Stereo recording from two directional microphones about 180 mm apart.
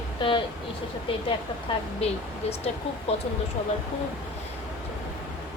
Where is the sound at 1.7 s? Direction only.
30° left (ahead or behind).